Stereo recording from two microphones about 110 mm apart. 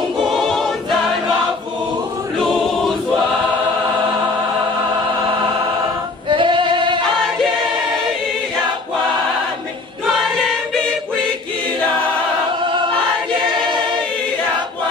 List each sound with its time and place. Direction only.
0.2 s choir: centre (ahead or behind)
2.3 s choir: centre (ahead or behind)
6.2 s singing: 50° right (ahead or behind)
10.0 s choir: centre (ahead or behind)